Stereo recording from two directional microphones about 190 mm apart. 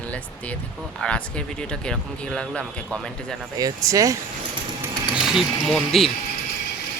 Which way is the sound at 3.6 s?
20° right (ahead or behind).